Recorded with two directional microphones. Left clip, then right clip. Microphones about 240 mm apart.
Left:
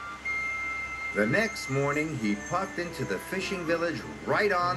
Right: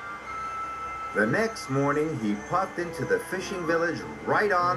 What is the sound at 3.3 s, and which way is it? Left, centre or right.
Speech, left.